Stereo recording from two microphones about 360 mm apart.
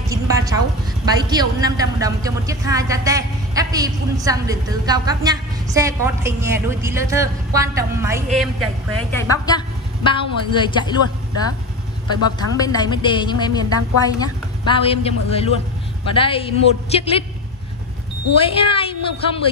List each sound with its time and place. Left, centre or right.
0.1 s a sound: centre
1.3 s a woman's voice: centre
9.1 s a woman's voice: centre
18.4 s a woman's voice: centre